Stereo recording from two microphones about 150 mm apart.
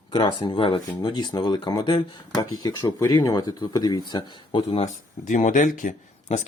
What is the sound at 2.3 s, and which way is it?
Speech, 25° left (ahead or behind).